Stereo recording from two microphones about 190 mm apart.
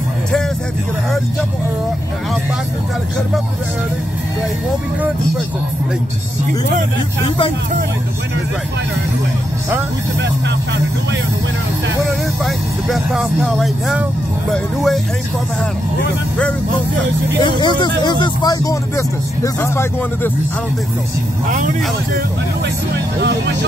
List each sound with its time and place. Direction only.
12.1 s speech: centre (ahead or behind)
17.4 s speech: 25° left (ahead or behind)
23.1 s speech: 65° right (ahead or behind)